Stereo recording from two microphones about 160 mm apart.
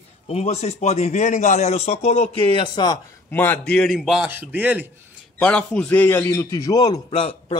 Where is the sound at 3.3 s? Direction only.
10° left (ahead or behind); by 4.9 s 10° right (ahead or behind).